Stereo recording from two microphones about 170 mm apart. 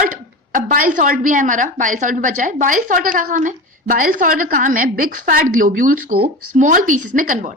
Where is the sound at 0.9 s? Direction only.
50° right (ahead or behind).